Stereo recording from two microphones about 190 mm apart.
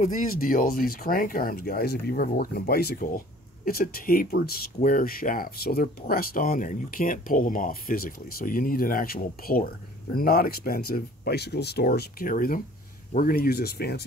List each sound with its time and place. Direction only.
0.0 s speech: 45° left (ahead or behind)